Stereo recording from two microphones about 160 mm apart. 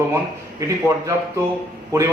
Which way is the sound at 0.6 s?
20° right (ahead or behind).